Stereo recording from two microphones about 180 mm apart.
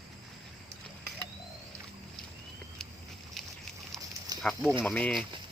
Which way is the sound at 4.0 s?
20° right (ahead or behind).